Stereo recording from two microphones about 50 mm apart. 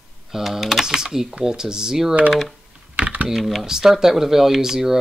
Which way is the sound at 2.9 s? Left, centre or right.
Right.